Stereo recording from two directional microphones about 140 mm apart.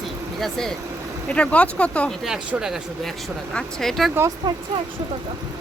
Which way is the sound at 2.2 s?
5° right (ahead or behind).